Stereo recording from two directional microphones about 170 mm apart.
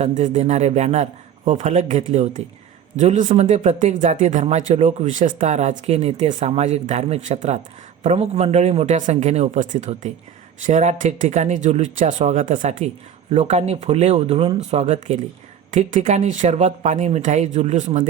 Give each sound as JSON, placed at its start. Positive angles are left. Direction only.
{"t": 0.0, "sound": "a man's voice", "side_deg": -45}